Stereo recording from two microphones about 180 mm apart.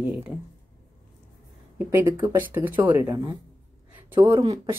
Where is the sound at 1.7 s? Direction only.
10° right (ahead or behind).